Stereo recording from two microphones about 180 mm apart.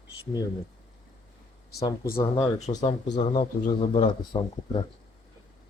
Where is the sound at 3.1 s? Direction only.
30° left (ahead or behind).